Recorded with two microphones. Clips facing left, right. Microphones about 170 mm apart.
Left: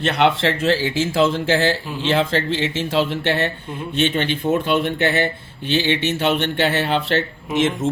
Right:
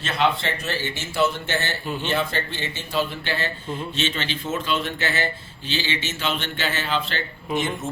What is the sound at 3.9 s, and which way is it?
A man's voice, 55° left (ahead or behind).